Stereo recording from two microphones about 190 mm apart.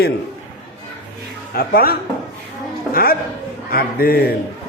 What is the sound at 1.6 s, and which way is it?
Speech, 50° left (ahead or behind).